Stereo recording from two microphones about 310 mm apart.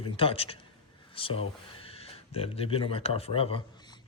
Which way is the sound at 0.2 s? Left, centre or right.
Centre.